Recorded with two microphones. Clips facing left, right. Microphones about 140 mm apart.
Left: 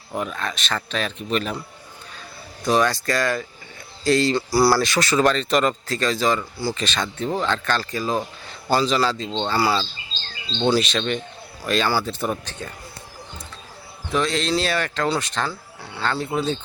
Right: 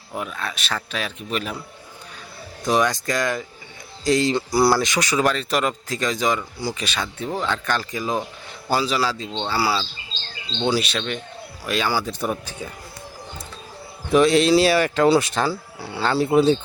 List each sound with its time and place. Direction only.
0.1 s speech: centre (ahead or behind)
2.6 s speech: 15° right (ahead or behind)
14.1 s speech: 10° right (ahead or behind)